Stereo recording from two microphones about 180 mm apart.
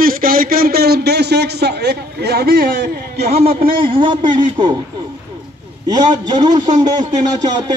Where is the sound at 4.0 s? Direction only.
25° right (ahead or behind).